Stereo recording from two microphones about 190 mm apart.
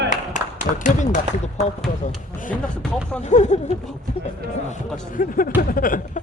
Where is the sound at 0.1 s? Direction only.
40° left (ahead or behind).